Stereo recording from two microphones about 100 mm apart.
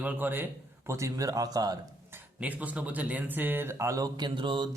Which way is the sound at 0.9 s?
30° right (ahead or behind).